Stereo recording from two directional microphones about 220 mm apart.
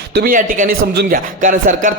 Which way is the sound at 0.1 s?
45° right (ahead or behind).